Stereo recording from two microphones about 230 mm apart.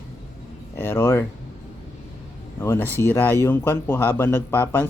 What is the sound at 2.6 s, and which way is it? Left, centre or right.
Speech, centre.